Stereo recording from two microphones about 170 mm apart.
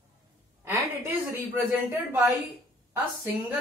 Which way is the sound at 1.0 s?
10° right (ahead or behind).